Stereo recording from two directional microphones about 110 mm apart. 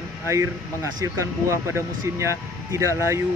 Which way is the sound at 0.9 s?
30° right (ahead or behind).